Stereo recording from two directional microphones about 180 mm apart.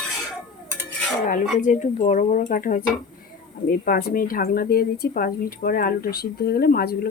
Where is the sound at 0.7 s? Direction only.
5° left (ahead or behind).